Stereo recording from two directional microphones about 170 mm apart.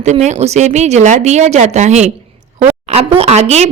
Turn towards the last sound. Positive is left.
turn(degrees=-40)  # may be behind; listen again after turning